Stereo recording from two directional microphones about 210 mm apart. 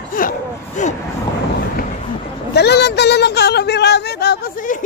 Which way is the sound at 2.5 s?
50° left (ahead or behind).